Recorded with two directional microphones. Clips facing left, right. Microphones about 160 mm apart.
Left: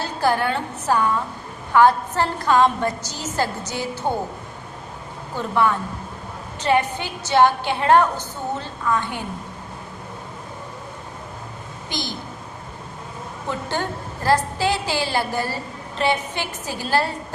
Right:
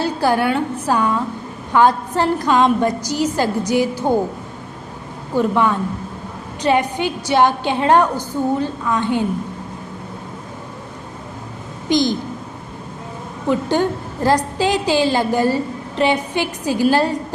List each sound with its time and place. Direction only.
0.0 s a woman's voice: 15° right (ahead or behind)
5.4 s a woman's voice: 15° right (ahead or behind)
11.9 s a woman's voice: 15° right (ahead or behind)
13.5 s a woman's voice: 15° right (ahead or behind)